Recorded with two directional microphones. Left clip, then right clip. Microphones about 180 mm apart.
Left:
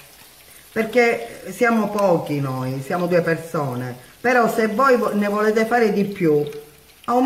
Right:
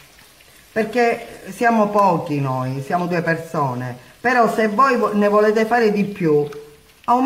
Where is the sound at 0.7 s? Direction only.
15° right (ahead or behind).